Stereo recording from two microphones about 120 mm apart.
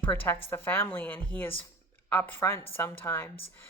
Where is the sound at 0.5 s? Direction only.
20° left (ahead or behind).